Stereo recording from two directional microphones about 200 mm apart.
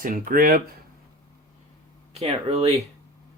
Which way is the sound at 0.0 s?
45° right (ahead or behind).